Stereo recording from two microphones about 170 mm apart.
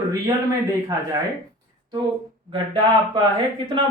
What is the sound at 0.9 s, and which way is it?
Speech, 20° right (ahead or behind).